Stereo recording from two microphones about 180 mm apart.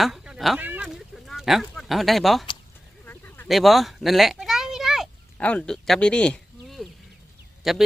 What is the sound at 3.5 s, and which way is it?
Speech, centre (ahead or behind).